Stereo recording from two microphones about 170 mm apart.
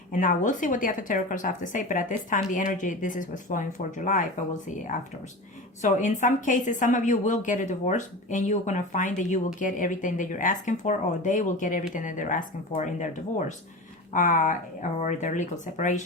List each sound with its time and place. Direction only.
0.1 s speech: 50° left (ahead or behind)
14.1 s speech: 50° left (ahead or behind)